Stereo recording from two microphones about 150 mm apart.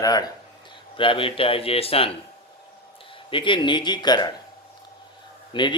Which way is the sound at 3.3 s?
35° left (ahead or behind).